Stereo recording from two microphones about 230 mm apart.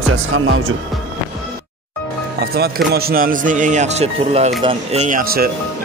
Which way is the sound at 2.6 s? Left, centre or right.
Right.